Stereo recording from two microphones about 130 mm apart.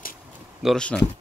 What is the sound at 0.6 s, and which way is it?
Speech, centre (ahead or behind).